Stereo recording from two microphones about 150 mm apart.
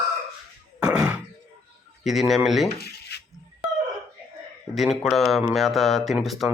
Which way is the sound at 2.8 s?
90° left.